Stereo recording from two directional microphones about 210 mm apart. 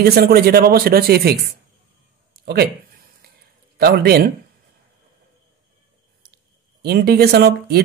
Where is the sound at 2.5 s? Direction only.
50° right (ahead or behind).